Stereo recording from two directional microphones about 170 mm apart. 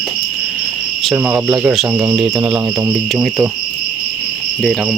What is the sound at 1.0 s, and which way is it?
Cricket, 10° right (ahead or behind).